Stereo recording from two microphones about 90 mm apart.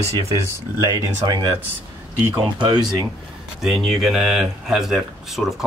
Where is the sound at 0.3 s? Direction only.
35° right (ahead or behind).